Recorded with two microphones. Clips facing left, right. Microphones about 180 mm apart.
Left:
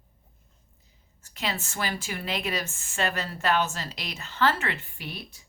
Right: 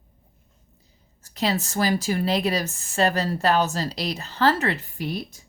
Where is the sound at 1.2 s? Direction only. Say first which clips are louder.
Right 8 dB; 35° right (ahead or behind).